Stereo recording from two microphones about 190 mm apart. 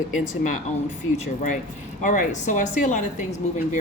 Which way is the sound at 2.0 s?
45° left (ahead or behind).